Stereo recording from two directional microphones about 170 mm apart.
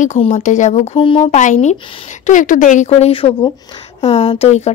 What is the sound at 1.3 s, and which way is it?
Speech, 45° left (ahead or behind).